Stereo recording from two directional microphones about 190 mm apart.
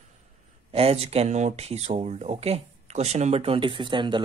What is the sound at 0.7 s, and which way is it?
Speech, 30° right (ahead or behind).